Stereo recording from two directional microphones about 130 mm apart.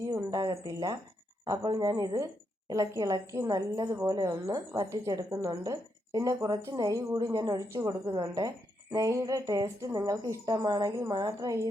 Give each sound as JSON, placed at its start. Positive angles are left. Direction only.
{"t": 0.1, "sound": "a woman's voice", "side_deg": -25}